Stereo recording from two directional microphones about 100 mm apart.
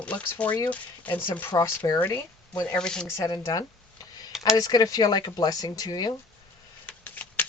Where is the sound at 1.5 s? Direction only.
40° left (ahead or behind).